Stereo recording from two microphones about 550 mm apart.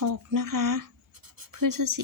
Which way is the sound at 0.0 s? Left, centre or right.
Right.